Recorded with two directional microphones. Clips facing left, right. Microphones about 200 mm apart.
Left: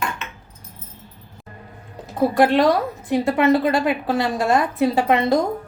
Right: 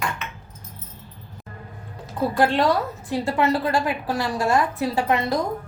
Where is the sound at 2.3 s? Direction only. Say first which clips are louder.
Left 3 dB; 20° left (ahead or behind).